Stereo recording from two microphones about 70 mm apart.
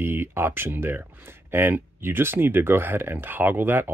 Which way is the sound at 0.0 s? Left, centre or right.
Right.